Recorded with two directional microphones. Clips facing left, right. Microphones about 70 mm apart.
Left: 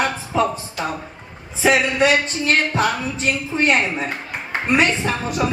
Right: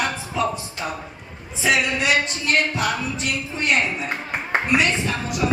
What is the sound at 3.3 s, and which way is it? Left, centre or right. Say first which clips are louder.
Speech: left 6 dB; left.